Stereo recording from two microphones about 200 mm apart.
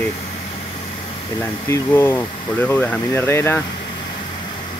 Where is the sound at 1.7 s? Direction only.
15° left (ahead or behind).